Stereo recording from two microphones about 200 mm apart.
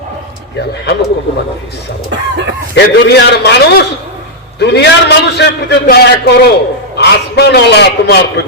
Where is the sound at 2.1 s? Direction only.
60° right (ahead or behind).